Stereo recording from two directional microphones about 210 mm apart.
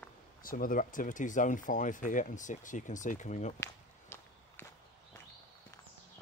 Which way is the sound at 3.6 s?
10° left (ahead or behind).